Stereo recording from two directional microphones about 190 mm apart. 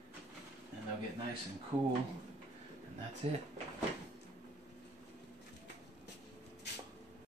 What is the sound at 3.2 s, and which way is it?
Speech, 30° right (ahead or behind).